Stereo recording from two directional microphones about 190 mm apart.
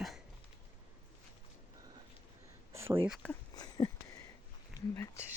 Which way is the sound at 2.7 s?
15° right (ahead or behind).